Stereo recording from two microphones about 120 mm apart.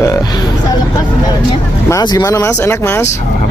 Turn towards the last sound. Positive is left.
turn(degrees=20)  # may be behind; listen again after turning